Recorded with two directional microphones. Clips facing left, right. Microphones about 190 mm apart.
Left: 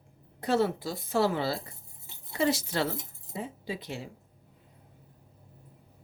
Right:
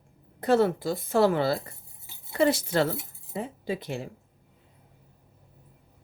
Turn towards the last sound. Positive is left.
turn(degrees=-50)  # may be behind; listen again after turning